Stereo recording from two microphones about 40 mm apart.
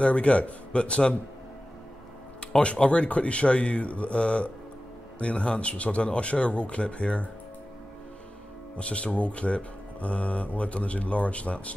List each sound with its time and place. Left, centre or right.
0.0 s speech: left
2.6 s speech: left
8.7 s speech: left